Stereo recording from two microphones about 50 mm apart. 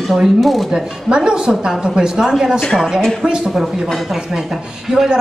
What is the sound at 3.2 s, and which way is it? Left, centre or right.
Speech, centre.